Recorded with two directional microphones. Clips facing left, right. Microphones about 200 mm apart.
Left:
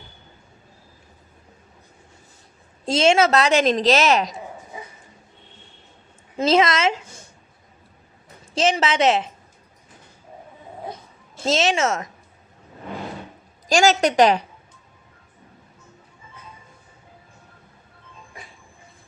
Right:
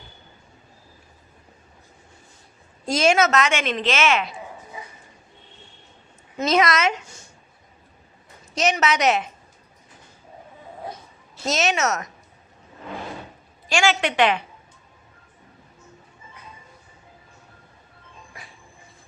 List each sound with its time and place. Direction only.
2.8 s a woman's voice: 25° left (ahead or behind)
6.3 s a woman's voice: 30° left (ahead or behind)
8.5 s a woman's voice: 30° left (ahead or behind)
11.4 s a woman's voice: 25° left (ahead or behind)
13.7 s a woman's voice: 40° left (ahead or behind)